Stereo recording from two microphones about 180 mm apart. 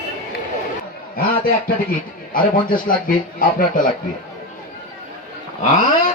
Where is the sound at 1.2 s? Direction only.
55° left (ahead or behind).